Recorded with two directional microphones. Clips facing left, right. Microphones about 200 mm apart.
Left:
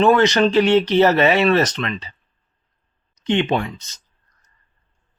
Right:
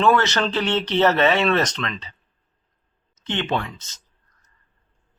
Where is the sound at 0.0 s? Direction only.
15° left (ahead or behind).